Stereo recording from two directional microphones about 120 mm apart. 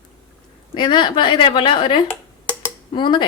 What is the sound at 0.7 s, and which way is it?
Speech, 40° left (ahead or behind).